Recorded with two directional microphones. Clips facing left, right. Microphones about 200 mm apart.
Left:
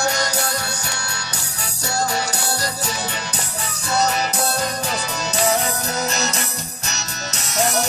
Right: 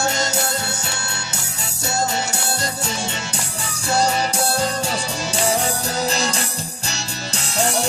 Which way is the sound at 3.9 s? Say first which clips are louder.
Right 1 dB; 30° right (ahead or behind).